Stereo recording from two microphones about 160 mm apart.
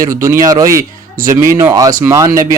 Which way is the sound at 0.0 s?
20° right (ahead or behind).